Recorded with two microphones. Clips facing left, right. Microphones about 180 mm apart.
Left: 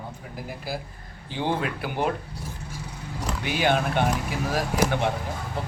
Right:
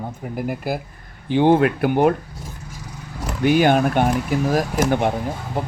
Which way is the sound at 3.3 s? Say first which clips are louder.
Right 8 dB; 50° right (ahead or behind).